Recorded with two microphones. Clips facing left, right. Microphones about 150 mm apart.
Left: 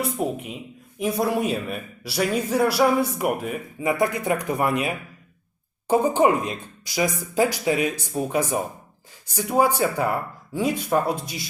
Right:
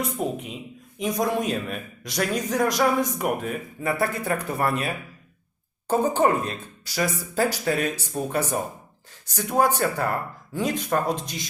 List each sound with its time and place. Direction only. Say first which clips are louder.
0.4 s a man's voice: left 1 dB; 5° left (ahead or behind)